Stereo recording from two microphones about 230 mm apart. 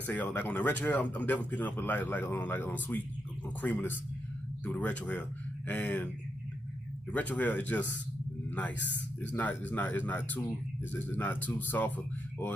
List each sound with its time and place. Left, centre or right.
0.0 s speech: centre
7.1 s speech: centre
8.7 s speech: left
9.3 s speech: centre